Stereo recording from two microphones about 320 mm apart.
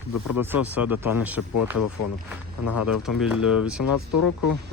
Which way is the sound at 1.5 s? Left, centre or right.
Left.